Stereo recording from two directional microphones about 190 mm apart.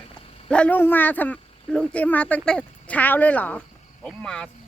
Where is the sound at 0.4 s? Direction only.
5° left (ahead or behind).